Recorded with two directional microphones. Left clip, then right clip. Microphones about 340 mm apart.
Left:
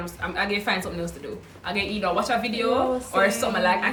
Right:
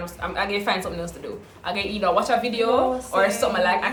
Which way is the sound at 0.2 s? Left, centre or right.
Centre.